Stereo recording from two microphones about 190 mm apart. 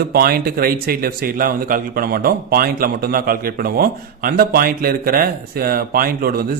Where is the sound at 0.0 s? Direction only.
55° right (ahead or behind).